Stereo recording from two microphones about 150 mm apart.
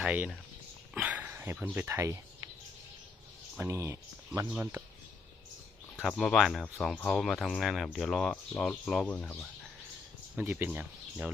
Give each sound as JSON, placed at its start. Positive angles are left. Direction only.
{"t": 0.0, "sound": "speech", "side_deg": -10}
{"t": 3.6, "sound": "speech", "side_deg": -20}
{"t": 6.1, "sound": "speech", "side_deg": 5}
{"t": 10.3, "sound": "speech", "side_deg": -15}